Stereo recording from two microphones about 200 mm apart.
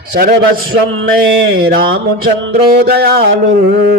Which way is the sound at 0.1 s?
45° right (ahead or behind).